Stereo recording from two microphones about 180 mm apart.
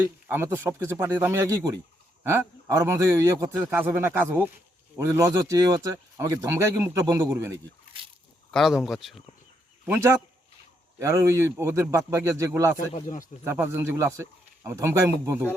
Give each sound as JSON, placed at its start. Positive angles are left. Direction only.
{"t": 0.3, "sound": "a man's voice", "side_deg": -10}
{"t": 8.4, "sound": "speech", "side_deg": 0}
{"t": 9.8, "sound": "a man's voice", "side_deg": -15}
{"t": 12.9, "sound": "speech", "side_deg": 45}
{"t": 13.4, "sound": "a man's voice", "side_deg": -15}